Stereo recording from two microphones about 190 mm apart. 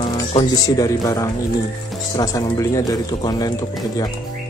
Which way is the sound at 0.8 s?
15° left (ahead or behind).